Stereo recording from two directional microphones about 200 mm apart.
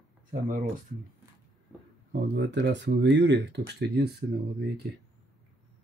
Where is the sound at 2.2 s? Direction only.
60° right (ahead or behind).